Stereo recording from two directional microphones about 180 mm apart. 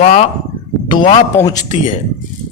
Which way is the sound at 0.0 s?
40° left (ahead or behind).